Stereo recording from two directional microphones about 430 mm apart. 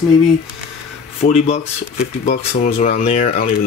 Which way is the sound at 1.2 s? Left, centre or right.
Centre.